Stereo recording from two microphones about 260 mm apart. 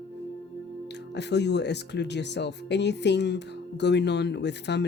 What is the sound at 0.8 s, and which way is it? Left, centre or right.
Speech, left.